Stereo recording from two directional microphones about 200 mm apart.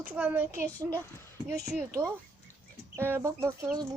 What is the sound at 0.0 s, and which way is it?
A child's voice, 10° right (ahead or behind).